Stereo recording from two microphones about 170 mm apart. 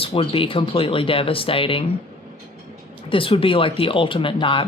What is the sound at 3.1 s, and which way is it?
Speech, 30° left (ahead or behind).